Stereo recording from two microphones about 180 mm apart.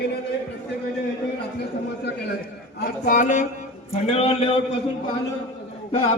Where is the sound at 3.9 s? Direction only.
35° left (ahead or behind).